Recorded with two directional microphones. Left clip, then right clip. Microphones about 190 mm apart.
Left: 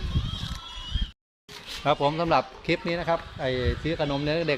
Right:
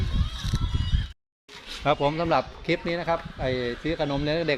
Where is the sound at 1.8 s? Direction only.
Centre (ahead or behind).